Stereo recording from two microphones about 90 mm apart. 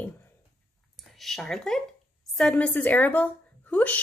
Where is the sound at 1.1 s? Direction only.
5° left (ahead or behind).